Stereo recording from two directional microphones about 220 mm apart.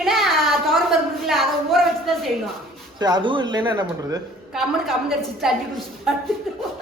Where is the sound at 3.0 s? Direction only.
20° right (ahead or behind).